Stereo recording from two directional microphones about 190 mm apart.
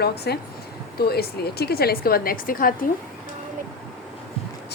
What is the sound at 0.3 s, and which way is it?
A woman's voice, 60° left (ahead or behind).